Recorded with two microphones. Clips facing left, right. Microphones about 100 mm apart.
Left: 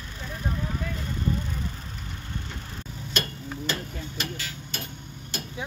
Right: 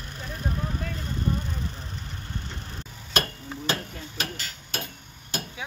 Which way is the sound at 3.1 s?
45° right (ahead or behind).